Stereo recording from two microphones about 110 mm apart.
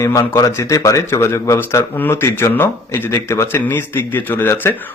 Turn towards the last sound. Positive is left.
turn(degrees=20)  # may be behind; listen again after turning